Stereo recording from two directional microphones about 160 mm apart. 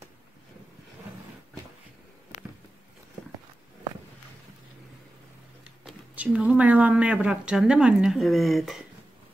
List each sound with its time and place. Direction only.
5.9 s speech: 5° right (ahead or behind)